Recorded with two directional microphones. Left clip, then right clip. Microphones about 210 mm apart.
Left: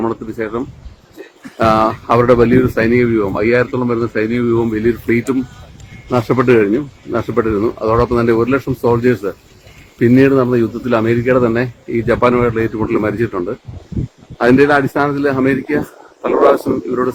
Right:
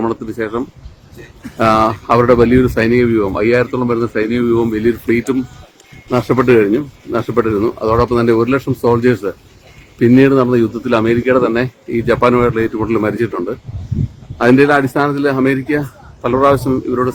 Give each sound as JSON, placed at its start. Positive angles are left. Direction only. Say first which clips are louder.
{"t": 0.0, "sound": "speech", "louder": "right 1 dB", "side_deg": -15}
{"t": 16.7, "sound": "speech", "louder": "right 1 dB", "side_deg": -15}